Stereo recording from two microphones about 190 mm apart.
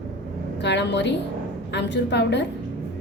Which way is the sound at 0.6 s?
65° left (ahead or behind).